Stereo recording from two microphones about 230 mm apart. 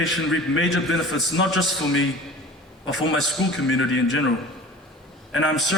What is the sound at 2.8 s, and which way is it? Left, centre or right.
A man's voice, left.